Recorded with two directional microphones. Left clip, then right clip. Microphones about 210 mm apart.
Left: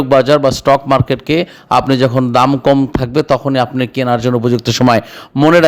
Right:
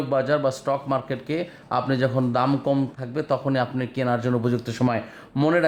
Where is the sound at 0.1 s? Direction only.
40° left (ahead or behind).